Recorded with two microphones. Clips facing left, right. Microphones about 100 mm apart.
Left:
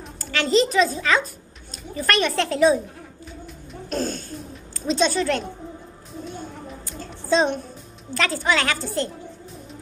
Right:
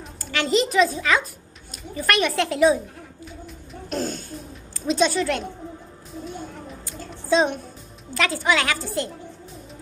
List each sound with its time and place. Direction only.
0.3 s a woman's voice: 15° right (ahead or behind)
3.9 s a woman's voice: 15° right (ahead or behind)
6.2 s a sound: centre (ahead or behind)
8.1 s a woman's voice: 10° right (ahead or behind)